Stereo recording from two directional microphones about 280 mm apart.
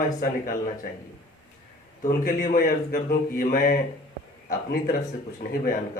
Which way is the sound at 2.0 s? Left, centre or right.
Left.